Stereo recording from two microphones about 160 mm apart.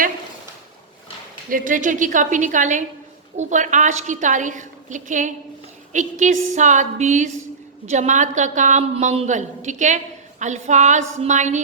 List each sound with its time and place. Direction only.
1.5 s a woman's voice: 55° right (ahead or behind)